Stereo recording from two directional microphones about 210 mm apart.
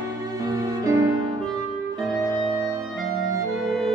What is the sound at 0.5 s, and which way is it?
Music, 15° right (ahead or behind).